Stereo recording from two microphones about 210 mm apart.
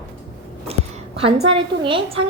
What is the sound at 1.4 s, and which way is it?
Speech, 25° right (ahead or behind).